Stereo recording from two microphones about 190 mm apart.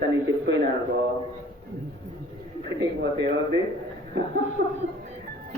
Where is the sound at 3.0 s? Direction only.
65° right (ahead or behind).